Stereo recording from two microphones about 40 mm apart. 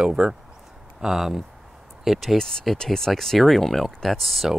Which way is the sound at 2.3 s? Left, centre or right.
Centre.